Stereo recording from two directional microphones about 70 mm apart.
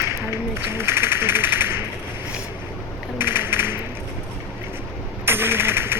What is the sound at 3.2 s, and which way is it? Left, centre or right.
Typing, right.